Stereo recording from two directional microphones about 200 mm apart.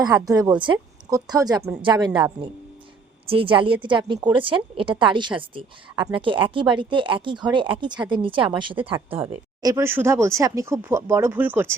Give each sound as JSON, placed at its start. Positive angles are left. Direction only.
{"t": 0.0, "sound": "a woman's voice", "side_deg": -20}
{"t": 9.2, "sound": "speech", "side_deg": -15}